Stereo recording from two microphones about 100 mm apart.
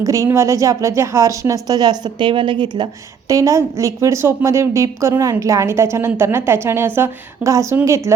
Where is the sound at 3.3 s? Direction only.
35° right (ahead or behind).